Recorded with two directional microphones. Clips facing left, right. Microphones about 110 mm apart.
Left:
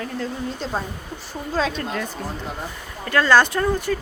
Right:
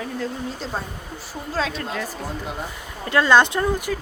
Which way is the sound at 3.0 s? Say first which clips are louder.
Even; 20° right (ahead or behind).